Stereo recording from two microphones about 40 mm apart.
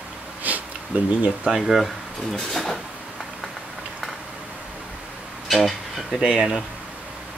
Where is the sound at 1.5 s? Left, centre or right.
Centre.